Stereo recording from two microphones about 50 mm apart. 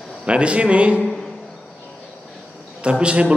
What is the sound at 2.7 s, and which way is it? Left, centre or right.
Speech, right.